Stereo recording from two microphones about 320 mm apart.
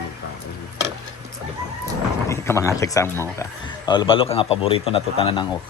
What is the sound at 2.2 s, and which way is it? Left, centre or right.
A man's voice, centre.